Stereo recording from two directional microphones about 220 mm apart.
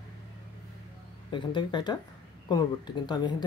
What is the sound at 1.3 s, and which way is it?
Speech, 20° left (ahead or behind).